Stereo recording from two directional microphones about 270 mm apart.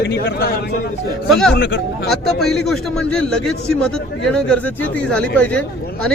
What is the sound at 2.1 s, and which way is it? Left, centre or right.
A man's voice, centre.